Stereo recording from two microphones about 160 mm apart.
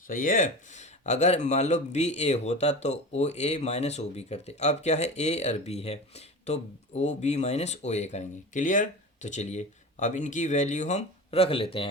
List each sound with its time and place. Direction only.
0.1 s speech: 60° left (ahead or behind); by 11.9 s 35° left (ahead or behind)